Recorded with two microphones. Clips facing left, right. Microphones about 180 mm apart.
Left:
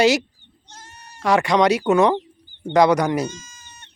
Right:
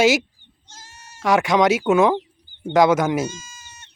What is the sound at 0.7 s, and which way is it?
Goat, 60° left (ahead or behind).